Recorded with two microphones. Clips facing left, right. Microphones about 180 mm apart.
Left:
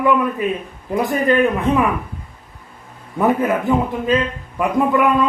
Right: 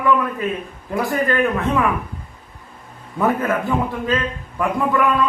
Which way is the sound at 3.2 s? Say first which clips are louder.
Left 2 dB; 20° left (ahead or behind).